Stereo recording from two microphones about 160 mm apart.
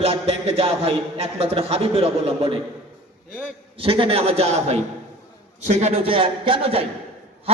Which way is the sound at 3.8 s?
35° right (ahead or behind).